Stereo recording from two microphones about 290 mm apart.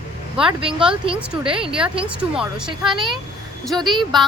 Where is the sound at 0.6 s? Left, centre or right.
Centre.